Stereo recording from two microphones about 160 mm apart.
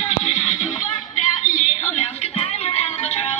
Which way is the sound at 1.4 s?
55° left (ahead or behind).